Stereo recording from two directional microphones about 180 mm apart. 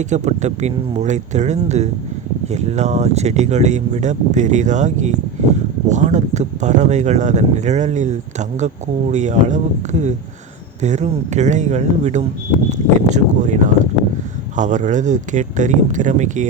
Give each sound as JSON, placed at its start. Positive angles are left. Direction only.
{"t": 0.0, "sound": "speech", "side_deg": -40}
{"t": 10.8, "sound": "speech", "side_deg": -40}